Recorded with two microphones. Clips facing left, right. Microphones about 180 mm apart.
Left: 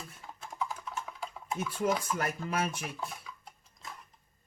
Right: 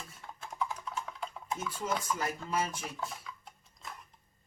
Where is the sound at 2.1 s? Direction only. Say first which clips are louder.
Left 1 dB; 65° left (ahead or behind).